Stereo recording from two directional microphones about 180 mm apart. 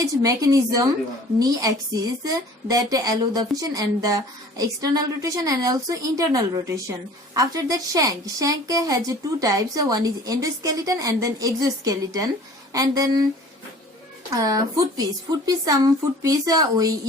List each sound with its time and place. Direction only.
0.0 s a woman's voice: 20° right (ahead or behind)
14.3 s a woman's voice: 20° right (ahead or behind)